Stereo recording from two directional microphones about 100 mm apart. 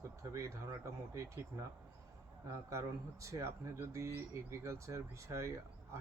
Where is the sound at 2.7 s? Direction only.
30° right (ahead or behind).